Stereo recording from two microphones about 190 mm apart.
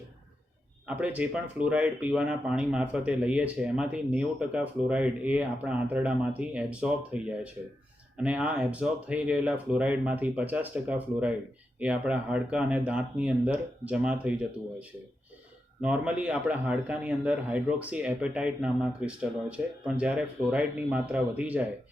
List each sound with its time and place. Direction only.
0.9 s a man's voice: 10° right (ahead or behind)